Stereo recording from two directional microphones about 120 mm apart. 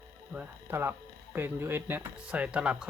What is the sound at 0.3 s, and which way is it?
Speech, 15° right (ahead or behind).